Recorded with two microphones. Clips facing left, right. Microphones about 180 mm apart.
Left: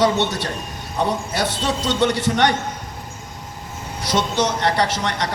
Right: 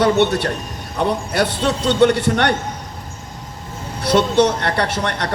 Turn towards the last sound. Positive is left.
turn(degrees=-60)  # may be behind; listen again after turning